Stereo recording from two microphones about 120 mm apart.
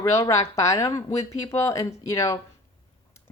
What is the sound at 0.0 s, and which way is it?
Speech, 25° left (ahead or behind).